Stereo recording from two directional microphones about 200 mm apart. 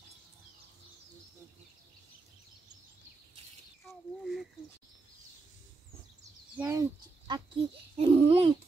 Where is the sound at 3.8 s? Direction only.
Centre (ahead or behind).